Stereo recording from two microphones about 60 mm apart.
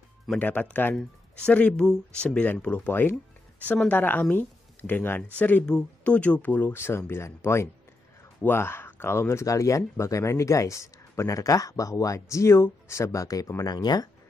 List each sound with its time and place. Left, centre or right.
0.4 s speech: left
2.9 s speech: left
5.7 s speech: centre; by 9.5 s left
9.5 s speech: left
13.6 s speech: left